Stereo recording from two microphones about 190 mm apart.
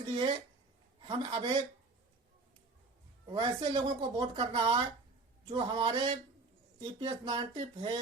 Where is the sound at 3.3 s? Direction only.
25° right (ahead or behind).